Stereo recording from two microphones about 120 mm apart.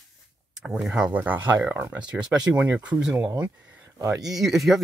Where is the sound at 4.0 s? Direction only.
30° right (ahead or behind).